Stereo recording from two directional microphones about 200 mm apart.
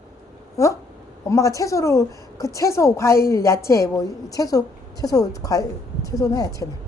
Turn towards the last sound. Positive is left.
turn(degrees=15)  # may be behind; listen again after turning